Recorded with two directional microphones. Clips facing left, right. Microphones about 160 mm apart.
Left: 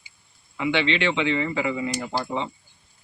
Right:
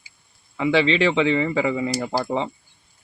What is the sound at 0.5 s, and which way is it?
Speech, 35° right (ahead or behind).